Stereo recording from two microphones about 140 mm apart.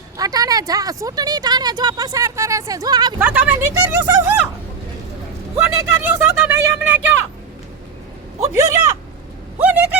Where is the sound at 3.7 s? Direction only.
20° right (ahead or behind).